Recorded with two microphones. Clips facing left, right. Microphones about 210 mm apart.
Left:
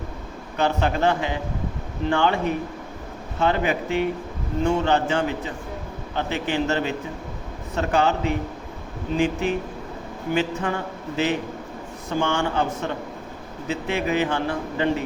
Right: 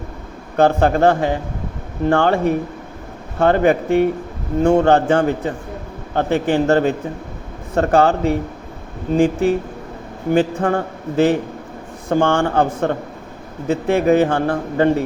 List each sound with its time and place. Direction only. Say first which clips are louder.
0.5 s a man's voice: right 8 dB; 50° right (ahead or behind)